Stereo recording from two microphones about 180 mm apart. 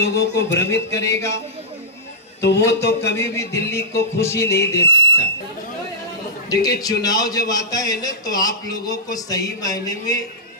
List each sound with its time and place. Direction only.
0.0 s speech: 70° left (ahead or behind)
0.9 s music: 15° left (ahead or behind)
2.4 s speech: 70° left (ahead or behind)
3.2 s music: 15° left (ahead or behind)
4.5 s speech: 70° left (ahead or behind)
6.5 s a man's voice: 20° left (ahead or behind)